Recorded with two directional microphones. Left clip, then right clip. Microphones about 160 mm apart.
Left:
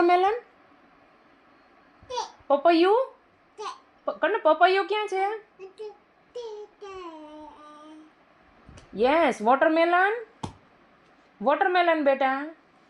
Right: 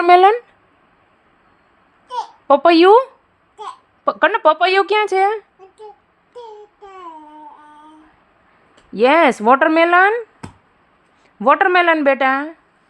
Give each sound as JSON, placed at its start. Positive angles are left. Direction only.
{"t": 0.0, "sound": "speech", "side_deg": -55}
{"t": 2.5, "sound": "speech", "side_deg": -60}
{"t": 9.0, "sound": "speech", "side_deg": -45}
{"t": 11.4, "sound": "speech", "side_deg": -55}